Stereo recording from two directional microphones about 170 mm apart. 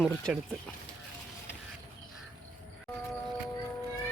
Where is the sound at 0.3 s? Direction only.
5° right (ahead or behind).